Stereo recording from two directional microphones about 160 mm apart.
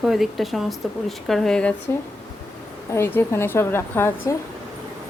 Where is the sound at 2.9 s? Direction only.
15° left (ahead or behind).